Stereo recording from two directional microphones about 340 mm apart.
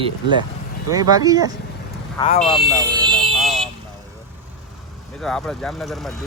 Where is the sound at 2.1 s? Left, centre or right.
Centre.